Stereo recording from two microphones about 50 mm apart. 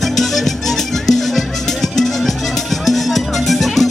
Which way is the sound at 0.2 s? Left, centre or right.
Centre.